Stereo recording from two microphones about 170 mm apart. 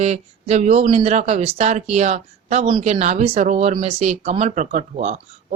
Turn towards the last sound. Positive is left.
turn(degrees=-40)  # may be behind; listen again after turning